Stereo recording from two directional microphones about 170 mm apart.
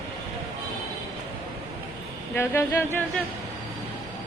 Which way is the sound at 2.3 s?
15° left (ahead or behind).